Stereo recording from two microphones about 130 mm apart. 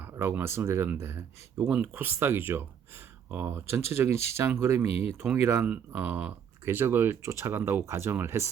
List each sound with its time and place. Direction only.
0.0 s speech: 20° right (ahead or behind)
1.5 s speech: 5° right (ahead or behind)
4.9 s speech: 50° left (ahead or behind)
5.4 s speech: 20° right (ahead or behind)